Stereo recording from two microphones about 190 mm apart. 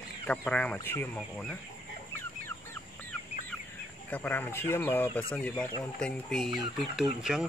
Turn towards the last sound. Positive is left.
turn(degrees=0)  # may be behind; listen again after turning